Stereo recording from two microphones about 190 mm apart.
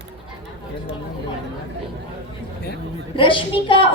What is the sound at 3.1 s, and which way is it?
Speech, 25° left (ahead or behind).